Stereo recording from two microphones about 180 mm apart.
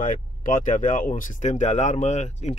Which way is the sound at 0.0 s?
45° left (ahead or behind).